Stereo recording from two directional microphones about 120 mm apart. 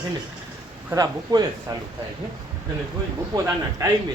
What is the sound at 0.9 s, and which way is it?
Speech, 35° right (ahead or behind).